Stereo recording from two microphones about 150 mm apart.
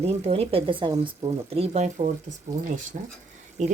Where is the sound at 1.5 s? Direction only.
45° right (ahead or behind).